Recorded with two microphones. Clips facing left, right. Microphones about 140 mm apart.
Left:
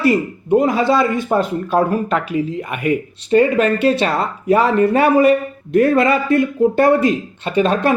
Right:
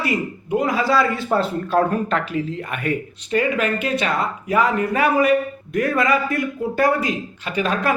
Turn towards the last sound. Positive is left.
turn(degrees=25)  # may be behind; listen again after turning